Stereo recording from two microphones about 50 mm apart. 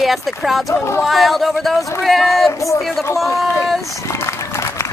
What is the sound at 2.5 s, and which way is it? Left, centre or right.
Speech, left.